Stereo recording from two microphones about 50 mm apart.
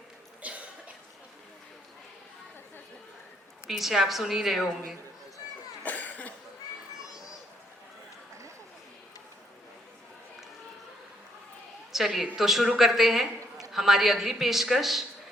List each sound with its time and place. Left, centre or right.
0.4 s cough: right
3.7 s a woman's voice: centre
5.8 s cough: left
11.9 s a woman's voice: centre